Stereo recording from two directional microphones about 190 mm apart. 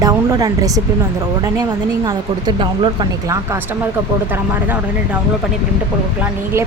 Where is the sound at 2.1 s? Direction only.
25° right (ahead or behind).